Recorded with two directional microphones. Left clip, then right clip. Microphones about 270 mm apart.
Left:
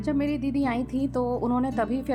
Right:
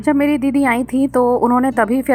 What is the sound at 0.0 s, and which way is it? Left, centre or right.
A woman's voice, right.